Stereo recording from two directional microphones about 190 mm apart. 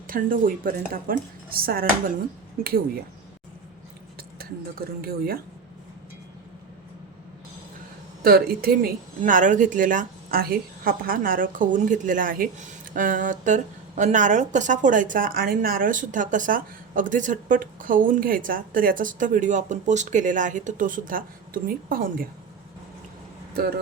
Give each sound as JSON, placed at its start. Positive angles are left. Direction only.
{"t": 0.1, "sound": "speech", "side_deg": -50}
{"t": 4.4, "sound": "speech", "side_deg": -50}
{"t": 8.2, "sound": "speech", "side_deg": -50}
{"t": 23.6, "sound": "speech", "side_deg": -55}